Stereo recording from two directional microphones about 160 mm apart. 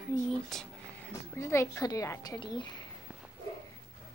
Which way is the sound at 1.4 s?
15° left (ahead or behind).